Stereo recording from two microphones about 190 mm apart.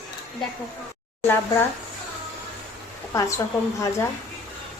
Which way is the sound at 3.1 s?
15° left (ahead or behind).